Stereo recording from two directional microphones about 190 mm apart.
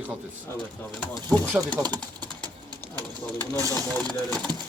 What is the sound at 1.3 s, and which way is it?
Speech, 10° left (ahead or behind).